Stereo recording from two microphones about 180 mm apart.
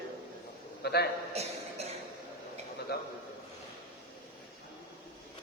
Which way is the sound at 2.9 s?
60° left (ahead or behind).